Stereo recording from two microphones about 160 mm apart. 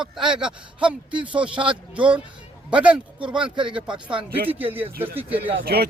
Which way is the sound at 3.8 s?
30° right (ahead or behind).